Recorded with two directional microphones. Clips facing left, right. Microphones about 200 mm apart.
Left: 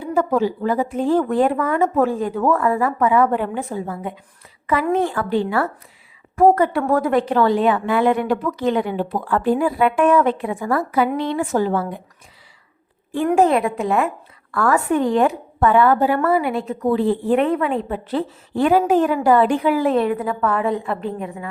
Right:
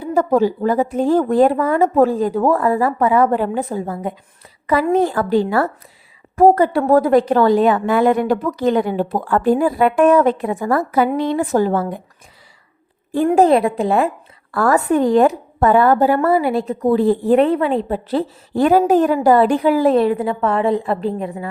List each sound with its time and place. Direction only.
0.0 s a woman's voice: 40° right (ahead or behind)
13.2 s a woman's voice: 35° right (ahead or behind)